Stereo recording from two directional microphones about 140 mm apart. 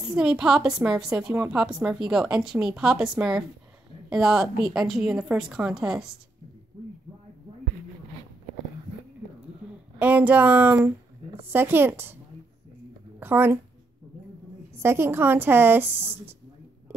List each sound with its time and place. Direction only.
0.1 s a woman's voice: 5° right (ahead or behind)
9.9 s a woman's voice: 10° right (ahead or behind)
13.2 s a woman's voice: 15° right (ahead or behind)
14.7 s a woman's voice: 15° right (ahead or behind)